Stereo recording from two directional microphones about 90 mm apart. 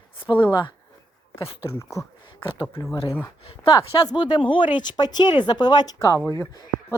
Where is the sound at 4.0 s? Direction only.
55° left (ahead or behind).